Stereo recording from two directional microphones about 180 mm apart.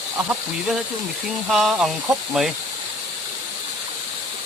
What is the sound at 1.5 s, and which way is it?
Speech, centre (ahead or behind).